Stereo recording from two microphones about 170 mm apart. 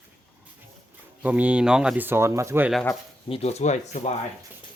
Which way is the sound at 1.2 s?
10° right (ahead or behind).